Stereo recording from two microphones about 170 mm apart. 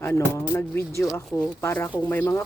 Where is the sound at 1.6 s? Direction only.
15° left (ahead or behind).